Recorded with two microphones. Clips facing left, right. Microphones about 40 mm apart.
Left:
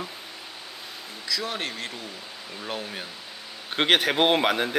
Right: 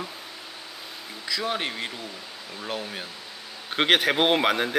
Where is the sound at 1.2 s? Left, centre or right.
Right.